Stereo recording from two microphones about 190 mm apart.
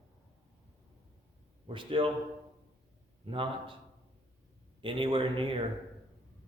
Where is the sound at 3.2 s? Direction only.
25° right (ahead or behind).